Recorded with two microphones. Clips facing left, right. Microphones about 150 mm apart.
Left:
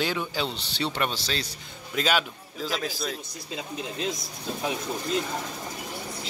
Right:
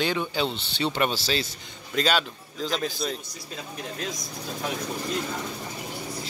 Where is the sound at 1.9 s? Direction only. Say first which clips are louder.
Right 1 dB; 5° left (ahead or behind).